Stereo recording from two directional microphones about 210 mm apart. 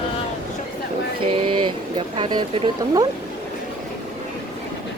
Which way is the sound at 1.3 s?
25° right (ahead or behind).